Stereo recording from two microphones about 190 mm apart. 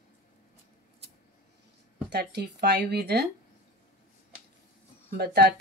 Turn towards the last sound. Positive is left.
turn(degrees=-55)  # may be behind; listen again after turning